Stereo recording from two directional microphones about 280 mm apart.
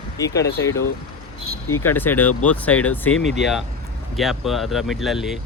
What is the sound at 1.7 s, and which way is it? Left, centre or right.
Speech, centre.